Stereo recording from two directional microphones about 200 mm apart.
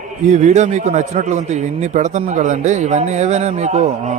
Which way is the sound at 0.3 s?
35° right (ahead or behind).